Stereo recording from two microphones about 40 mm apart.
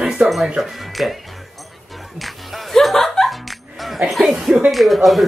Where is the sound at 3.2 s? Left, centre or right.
Centre.